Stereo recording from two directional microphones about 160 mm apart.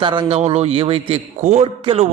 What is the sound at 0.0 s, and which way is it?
A man's voice, 30° right (ahead or behind).